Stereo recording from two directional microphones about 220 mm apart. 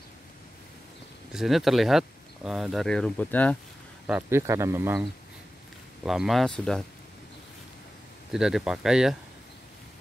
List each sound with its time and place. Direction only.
1.3 s speech: centre (ahead or behind)
4.1 s speech: 10° right (ahead or behind)
6.0 s speech: centre (ahead or behind)
8.3 s speech: centre (ahead or behind)